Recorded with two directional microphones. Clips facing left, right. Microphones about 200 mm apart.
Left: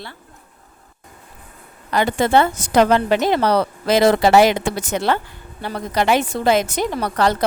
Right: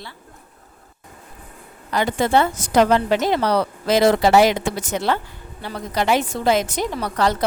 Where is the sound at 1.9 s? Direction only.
65° left (ahead or behind).